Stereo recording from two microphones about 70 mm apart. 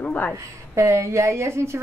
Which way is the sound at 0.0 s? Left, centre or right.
Left.